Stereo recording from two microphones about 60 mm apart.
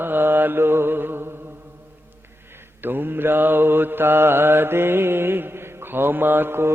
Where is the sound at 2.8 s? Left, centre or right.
Right.